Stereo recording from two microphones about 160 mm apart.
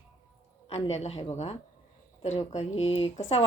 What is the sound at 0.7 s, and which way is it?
Speech, 40° left (ahead or behind).